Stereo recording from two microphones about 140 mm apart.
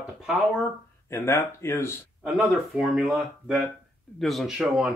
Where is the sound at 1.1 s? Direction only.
20° left (ahead or behind).